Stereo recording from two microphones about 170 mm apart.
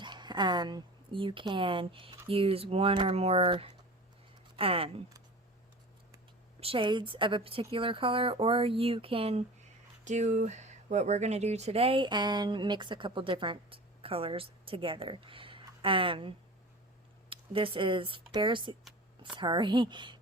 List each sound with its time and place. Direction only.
0.0 s speech: 25° right (ahead or behind)
6.6 s speech: 30° right (ahead or behind)